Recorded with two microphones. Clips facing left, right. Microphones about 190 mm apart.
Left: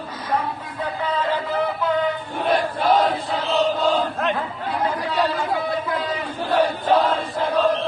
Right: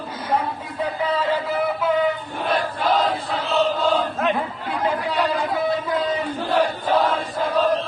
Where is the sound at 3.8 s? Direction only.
Centre (ahead or behind).